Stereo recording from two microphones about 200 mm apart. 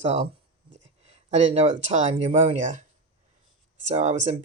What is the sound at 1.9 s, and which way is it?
Speech, 35° right (ahead or behind).